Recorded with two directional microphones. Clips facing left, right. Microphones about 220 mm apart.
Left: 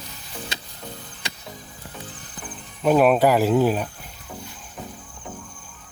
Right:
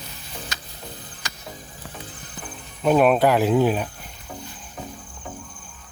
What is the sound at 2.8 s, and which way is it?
Speech, centre (ahead or behind).